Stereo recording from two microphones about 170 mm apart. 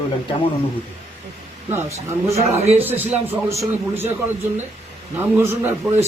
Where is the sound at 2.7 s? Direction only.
10° right (ahead or behind).